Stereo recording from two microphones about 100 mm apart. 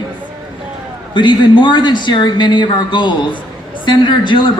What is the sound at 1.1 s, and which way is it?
A man's voice, 50° left (ahead or behind).